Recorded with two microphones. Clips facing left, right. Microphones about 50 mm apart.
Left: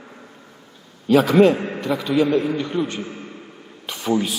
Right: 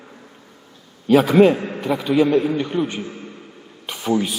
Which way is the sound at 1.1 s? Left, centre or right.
Centre.